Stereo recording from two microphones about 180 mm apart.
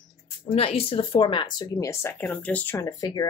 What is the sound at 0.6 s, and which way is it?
Speech, 35° left (ahead or behind).